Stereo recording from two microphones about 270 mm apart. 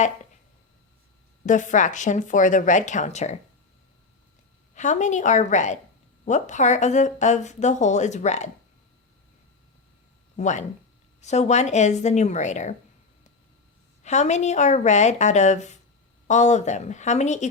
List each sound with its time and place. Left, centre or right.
1.5 s speech: left
4.7 s speech: left
10.3 s speech: left
14.0 s speech: left